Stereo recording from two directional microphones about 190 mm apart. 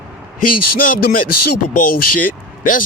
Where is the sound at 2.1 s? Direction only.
45° left (ahead or behind).